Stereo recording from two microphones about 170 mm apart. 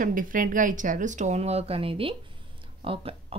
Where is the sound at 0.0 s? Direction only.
55° right (ahead or behind).